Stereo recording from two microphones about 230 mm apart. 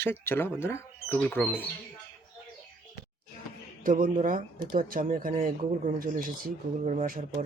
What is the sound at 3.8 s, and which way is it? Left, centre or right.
Speech, right.